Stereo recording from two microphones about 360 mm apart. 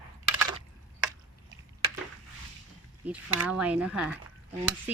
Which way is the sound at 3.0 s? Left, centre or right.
Centre.